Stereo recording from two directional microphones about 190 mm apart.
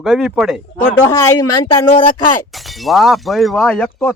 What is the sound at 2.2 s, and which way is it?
Speech, 45° left (ahead or behind).